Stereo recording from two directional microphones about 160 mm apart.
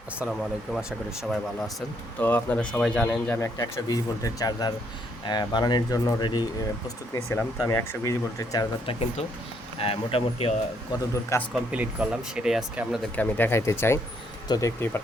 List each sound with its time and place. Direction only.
0.2 s speech: centre (ahead or behind)
2.1 s speech: 10° left (ahead or behind)
8.9 s speech: 40° left (ahead or behind)
11.1 s speech: 20° left (ahead or behind)
11.5 s speech: 5° right (ahead or behind)
13.1 s speech: 10° left (ahead or behind)